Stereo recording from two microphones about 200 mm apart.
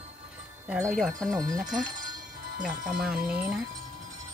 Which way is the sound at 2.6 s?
5° right (ahead or behind).